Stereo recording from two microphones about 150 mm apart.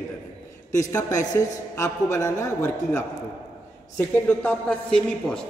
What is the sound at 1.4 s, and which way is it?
A man's voice, 20° left (ahead or behind).